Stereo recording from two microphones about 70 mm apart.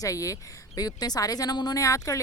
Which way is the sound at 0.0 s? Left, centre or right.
Left.